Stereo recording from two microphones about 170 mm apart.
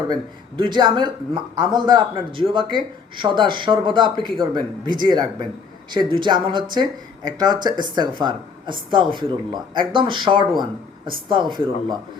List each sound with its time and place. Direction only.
0.1 s a man's voice: 25° right (ahead or behind)